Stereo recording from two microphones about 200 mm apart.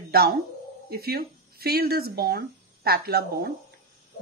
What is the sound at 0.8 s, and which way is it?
A woman's voice, 50° right (ahead or behind).